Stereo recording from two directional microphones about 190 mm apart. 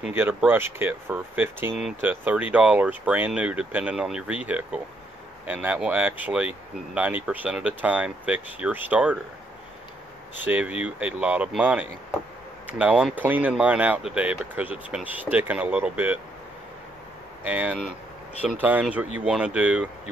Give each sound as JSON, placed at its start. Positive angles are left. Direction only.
{"t": 0.0, "sound": "speech", "side_deg": -10}
{"t": 10.4, "sound": "speech", "side_deg": -10}
{"t": 17.5, "sound": "speech", "side_deg": -10}